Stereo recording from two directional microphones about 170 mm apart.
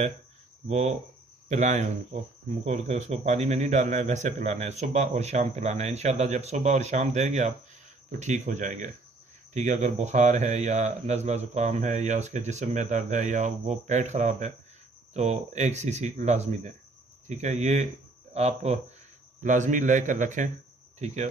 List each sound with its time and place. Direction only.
0.7 s speech: 40° right (ahead or behind)